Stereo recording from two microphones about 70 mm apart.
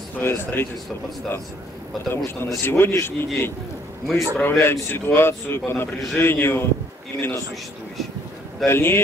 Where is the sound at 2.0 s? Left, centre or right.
Left.